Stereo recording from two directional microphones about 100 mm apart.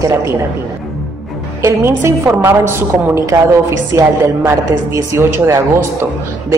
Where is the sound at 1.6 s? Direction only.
25° right (ahead or behind).